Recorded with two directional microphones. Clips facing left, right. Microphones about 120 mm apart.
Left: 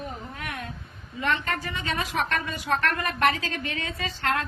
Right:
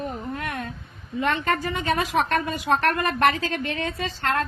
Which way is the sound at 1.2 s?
35° right (ahead or behind).